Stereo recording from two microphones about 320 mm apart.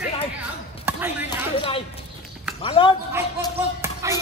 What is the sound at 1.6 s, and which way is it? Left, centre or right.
Clip-clop, centre.